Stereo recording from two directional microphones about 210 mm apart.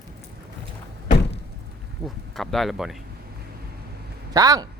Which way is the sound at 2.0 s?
Centre (ahead or behind).